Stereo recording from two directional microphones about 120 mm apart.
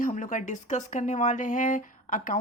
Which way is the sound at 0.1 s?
90° left.